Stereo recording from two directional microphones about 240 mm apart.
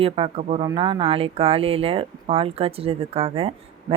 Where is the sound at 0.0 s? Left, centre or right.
Right.